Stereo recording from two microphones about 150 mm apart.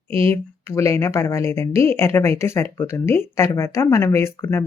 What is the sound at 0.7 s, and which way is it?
Speech, 20° left (ahead or behind).